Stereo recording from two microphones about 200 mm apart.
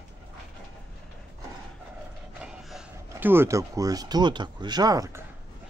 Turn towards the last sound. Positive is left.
turn(degrees=-15)  # may be behind; listen again after turning